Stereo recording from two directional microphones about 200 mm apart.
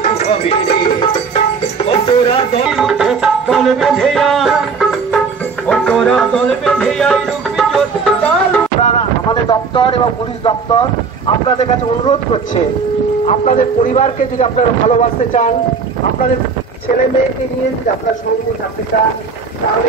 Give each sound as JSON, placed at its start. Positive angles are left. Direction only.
{"t": 0.2, "sound": "music", "side_deg": 30}
{"t": 1.9, "sound": "music", "side_deg": 25}
{"t": 2.7, "sound": "music", "side_deg": 0}
{"t": 8.8, "sound": "a man's voice", "side_deg": 25}